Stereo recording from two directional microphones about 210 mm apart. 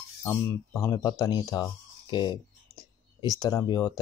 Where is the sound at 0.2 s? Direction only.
10° left (ahead or behind).